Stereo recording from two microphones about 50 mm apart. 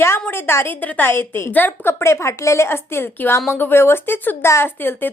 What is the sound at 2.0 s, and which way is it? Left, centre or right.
A woman's voice, left.